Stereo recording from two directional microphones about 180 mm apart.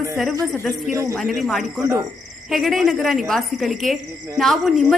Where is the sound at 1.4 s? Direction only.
Centre (ahead or behind).